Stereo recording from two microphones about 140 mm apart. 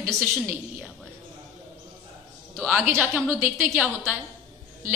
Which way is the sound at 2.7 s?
5° right (ahead or behind).